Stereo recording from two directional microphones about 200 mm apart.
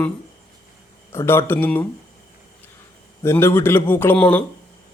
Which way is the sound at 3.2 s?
10° left (ahead or behind).